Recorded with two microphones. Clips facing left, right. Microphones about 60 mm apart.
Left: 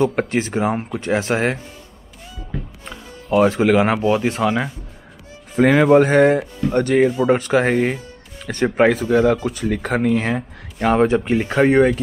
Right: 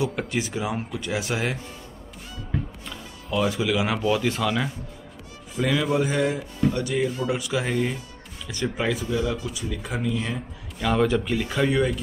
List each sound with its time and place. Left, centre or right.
0.0 s speech: left
3.3 s speech: left
4.1 s speech: left
5.6 s speech: left
10.9 s speech: left